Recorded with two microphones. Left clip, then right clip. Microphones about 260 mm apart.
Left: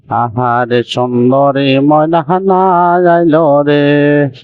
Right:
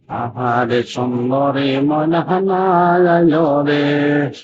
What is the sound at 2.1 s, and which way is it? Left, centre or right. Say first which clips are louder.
Mantra: left 6 dB; left.